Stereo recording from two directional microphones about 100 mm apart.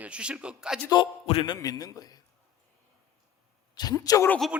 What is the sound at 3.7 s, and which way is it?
Speech, 40° left (ahead or behind).